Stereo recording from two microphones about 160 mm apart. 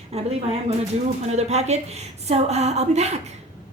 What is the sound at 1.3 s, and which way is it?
A woman's voice, 45° right (ahead or behind).